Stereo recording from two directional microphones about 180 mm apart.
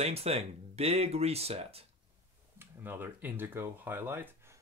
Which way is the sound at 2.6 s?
10° right (ahead or behind).